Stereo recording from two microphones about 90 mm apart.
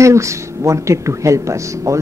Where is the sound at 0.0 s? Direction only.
35° right (ahead or behind).